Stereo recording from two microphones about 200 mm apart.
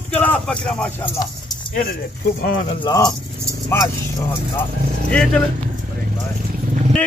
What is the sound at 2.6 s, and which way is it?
Speech, 20° left (ahead or behind).